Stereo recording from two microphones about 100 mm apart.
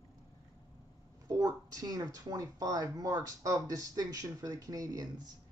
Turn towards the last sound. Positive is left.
turn(degrees=-40)  # may be behind; listen again after turning